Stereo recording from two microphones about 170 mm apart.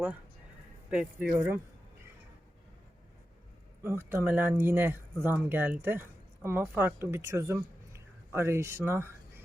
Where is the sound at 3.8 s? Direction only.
15° right (ahead or behind).